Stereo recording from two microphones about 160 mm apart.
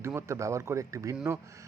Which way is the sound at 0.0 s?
15° right (ahead or behind).